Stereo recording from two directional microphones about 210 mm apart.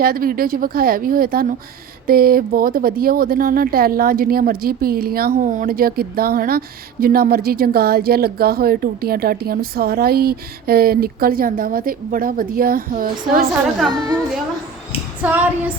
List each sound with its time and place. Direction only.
0.0 s speech: 45° right (ahead or behind)
15.2 s female singing: 5° right (ahead or behind)